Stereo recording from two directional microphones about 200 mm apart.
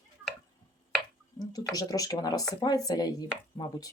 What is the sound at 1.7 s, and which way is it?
Speech, 20° left (ahead or behind).